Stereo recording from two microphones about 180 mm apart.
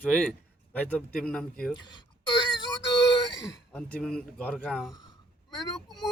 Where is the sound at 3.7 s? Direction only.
5° left (ahead or behind).